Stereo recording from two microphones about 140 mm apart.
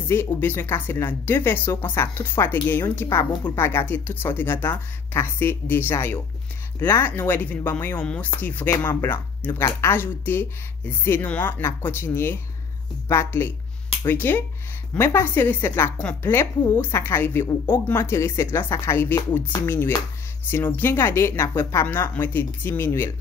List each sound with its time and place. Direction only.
0.1 s a woman's voice: 15° left (ahead or behind)